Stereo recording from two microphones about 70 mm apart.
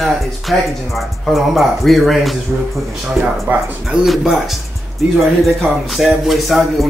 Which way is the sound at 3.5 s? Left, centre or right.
Right.